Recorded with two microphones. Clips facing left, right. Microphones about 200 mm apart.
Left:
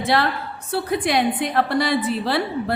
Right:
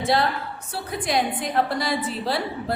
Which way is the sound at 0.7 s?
70° left (ahead or behind).